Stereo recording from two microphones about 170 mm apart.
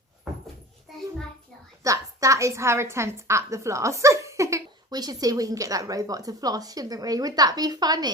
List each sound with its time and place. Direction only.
1.8 s a woman's voice: 20° right (ahead or behind)